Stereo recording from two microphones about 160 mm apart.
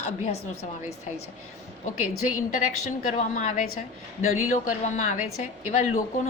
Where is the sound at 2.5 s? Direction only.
55° left (ahead or behind).